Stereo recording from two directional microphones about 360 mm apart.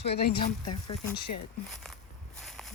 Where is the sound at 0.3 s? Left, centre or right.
Centre.